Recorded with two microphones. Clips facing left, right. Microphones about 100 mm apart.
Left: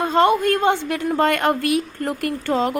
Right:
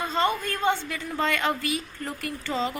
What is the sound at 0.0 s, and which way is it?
A woman's voice, 60° left (ahead or behind).